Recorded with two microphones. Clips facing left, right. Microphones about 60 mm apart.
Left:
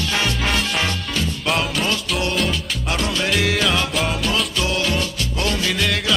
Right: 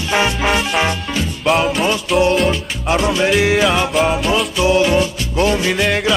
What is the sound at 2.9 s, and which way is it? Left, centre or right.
Music, right.